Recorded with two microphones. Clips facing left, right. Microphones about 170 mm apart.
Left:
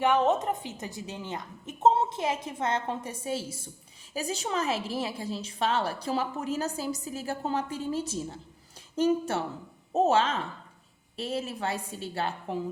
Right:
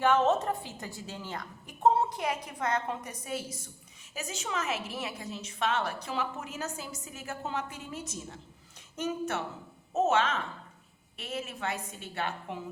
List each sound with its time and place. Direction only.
0.0 s a woman's voice: 15° left (ahead or behind); by 12.5 s 35° left (ahead or behind)